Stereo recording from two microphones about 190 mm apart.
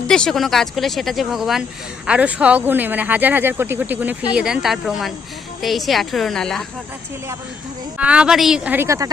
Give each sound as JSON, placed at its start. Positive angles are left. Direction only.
{"t": 0.1, "sound": "speech", "side_deg": 5}
{"t": 7.9, "sound": "speech", "side_deg": -5}